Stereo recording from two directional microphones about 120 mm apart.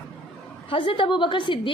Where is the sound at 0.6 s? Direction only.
45° left (ahead or behind).